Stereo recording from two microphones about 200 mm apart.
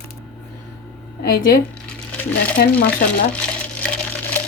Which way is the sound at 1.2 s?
45° left (ahead or behind).